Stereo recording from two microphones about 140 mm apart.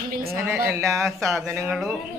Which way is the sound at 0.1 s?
90° right.